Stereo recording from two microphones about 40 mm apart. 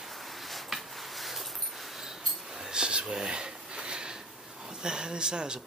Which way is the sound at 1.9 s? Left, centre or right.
Centre.